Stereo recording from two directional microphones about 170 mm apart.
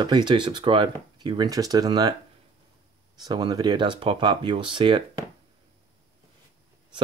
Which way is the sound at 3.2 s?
25° right (ahead or behind).